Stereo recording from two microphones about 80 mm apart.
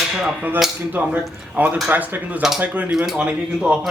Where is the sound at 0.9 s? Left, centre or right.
Centre.